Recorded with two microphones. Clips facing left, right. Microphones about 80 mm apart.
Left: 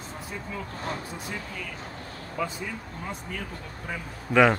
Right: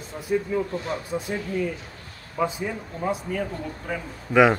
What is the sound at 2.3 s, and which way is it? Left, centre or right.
Speech, right.